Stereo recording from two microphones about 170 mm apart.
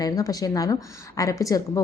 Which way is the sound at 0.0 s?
20° left (ahead or behind).